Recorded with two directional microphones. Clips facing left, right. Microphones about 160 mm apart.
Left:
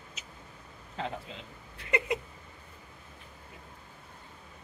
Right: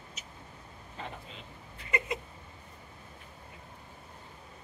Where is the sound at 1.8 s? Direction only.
65° left (ahead or behind).